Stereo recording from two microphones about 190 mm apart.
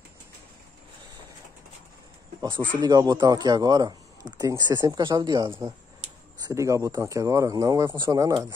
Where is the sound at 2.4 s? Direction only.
25° right (ahead or behind).